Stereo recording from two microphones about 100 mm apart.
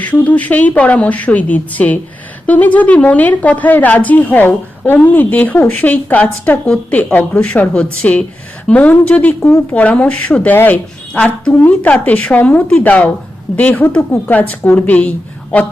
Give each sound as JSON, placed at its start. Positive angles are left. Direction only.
{"t": 0.0, "sound": "a woman's voice", "side_deg": 15}